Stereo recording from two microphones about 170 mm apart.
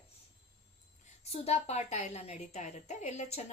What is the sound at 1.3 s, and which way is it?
A woman's voice, 35° left (ahead or behind).